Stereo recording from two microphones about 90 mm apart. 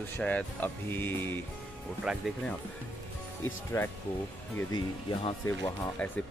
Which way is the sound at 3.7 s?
35° left (ahead or behind).